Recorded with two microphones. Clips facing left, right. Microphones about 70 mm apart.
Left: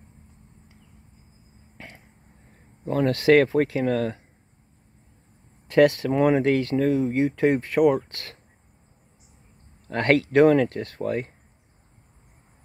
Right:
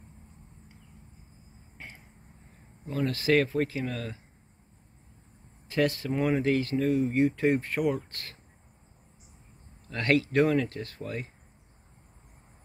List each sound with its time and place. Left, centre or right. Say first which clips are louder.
2.8 s speech: left 8 dB; left
5.7 s speech: left 9 dB; left
9.8 s speech: left 5 dB; left